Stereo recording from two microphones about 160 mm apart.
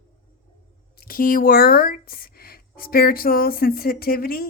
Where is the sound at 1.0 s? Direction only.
60° left (ahead or behind).